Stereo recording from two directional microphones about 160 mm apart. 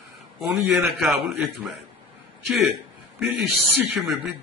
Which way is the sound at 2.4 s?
Centre (ahead or behind).